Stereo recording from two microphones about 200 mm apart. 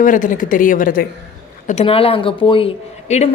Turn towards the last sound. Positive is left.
turn(degrees=35)  # may be behind; listen again after turning